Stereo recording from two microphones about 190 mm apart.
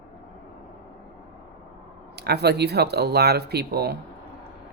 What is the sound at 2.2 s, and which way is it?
Speech, 60° right (ahead or behind).